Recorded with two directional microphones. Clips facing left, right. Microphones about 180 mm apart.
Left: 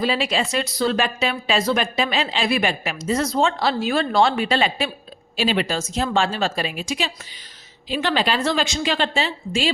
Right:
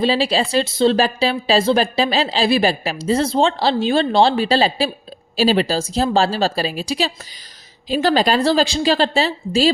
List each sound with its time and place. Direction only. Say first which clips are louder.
0.0 s speech: right 4 dB; 30° right (ahead or behind)